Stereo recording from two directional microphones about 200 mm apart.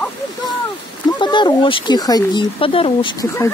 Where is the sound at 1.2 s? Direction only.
20° left (ahead or behind).